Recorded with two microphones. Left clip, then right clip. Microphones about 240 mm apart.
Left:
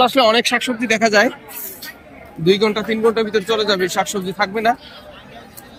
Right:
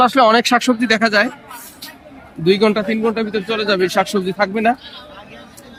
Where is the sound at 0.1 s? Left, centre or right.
Centre.